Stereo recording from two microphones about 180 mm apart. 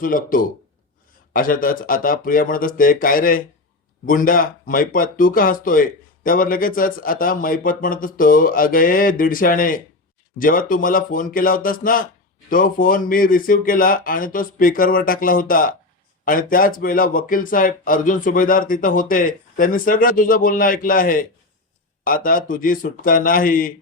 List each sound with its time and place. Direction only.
0.0 s speech: 50° left (ahead or behind)